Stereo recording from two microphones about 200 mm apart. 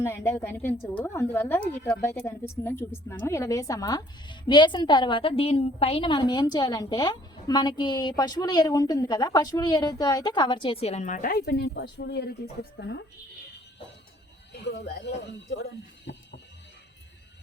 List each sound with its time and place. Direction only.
0.0 s a woman's voice: 10° left (ahead or behind); by 13.1 s 60° left (ahead or behind)
14.6 s speech: 55° left (ahead or behind)